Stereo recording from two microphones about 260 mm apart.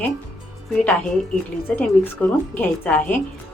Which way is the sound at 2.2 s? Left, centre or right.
Centre.